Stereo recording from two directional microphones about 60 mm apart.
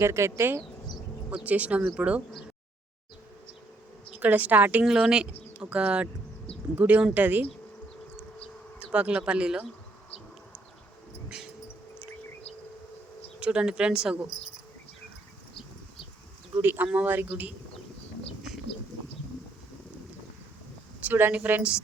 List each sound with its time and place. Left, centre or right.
0.0 s speech: right
1.3 s speech: right
4.1 s speech: right
4.9 s a woman's voice: centre
6.7 s speech: right
8.9 s speech: centre
13.4 s a woman's voice: centre
16.6 s speech: right
21.1 s speech: right